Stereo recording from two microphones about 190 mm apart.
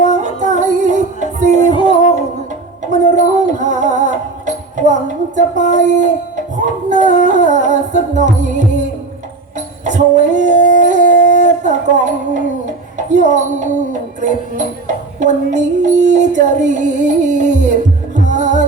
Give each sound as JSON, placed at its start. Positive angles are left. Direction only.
{"t": 0.0, "sound": "music", "side_deg": -40}
{"t": 1.7, "sound": "music", "side_deg": 25}
{"t": 2.9, "sound": "a sound", "side_deg": -40}
{"t": 3.4, "sound": "music", "side_deg": -40}
{"t": 9.8, "sound": "dog", "side_deg": -40}
{"t": 11.6, "sound": "music", "side_deg": -40}
{"t": 13.0, "sound": "a sound", "side_deg": -40}
{"t": 14.2, "sound": "music", "side_deg": -40}
{"t": 15.2, "sound": "child singing", "side_deg": -40}